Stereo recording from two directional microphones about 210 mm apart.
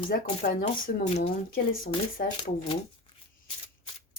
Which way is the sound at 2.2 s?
45° left (ahead or behind).